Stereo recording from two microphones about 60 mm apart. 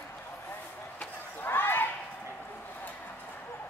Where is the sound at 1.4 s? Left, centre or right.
Left.